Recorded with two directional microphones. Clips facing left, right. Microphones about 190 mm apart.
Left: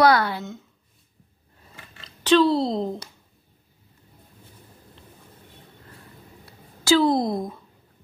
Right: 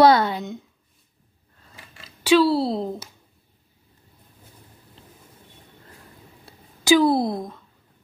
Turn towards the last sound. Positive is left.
turn(degrees=0)  # may be behind; listen again after turning